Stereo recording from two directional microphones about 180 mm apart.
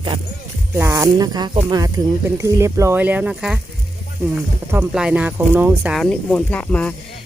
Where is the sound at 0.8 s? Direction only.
15° right (ahead or behind).